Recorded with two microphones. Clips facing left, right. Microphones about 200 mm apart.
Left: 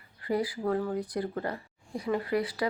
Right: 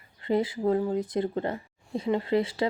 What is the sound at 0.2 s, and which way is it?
Speech, 25° right (ahead or behind).